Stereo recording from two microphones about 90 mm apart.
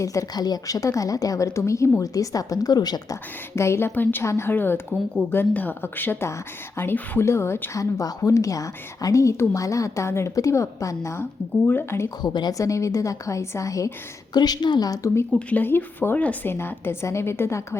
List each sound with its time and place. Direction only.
0.0 s a woman's voice: 40° left (ahead or behind)
3.5 s a woman's voice: 30° left (ahead or behind)
12.2 s a woman's voice: 55° left (ahead or behind)
12.5 s a woman's voice: 35° left (ahead or behind)
14.3 s a woman's voice: 50° left (ahead or behind); by 15.3 s 35° left (ahead or behind)
15.4 s a woman's voice: 15° left (ahead or behind)